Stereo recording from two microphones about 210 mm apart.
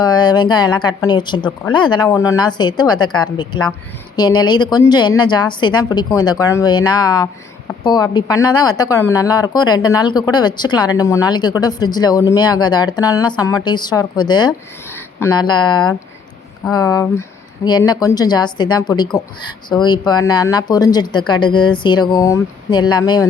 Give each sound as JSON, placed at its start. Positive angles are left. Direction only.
{"t": 0.0, "sound": "speech", "side_deg": 20}